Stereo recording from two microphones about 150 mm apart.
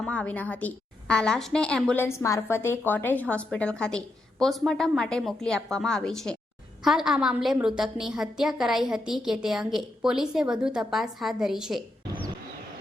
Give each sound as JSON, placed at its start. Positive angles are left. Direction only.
{"t": 0.0, "sound": "a woman's voice", "side_deg": 10}
{"t": 2.0, "sound": "a woman's voice", "side_deg": 20}